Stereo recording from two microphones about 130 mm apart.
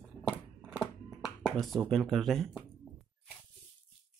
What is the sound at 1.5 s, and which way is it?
Speech, centre (ahead or behind).